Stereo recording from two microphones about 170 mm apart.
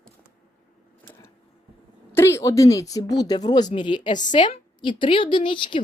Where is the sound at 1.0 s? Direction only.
10° left (ahead or behind).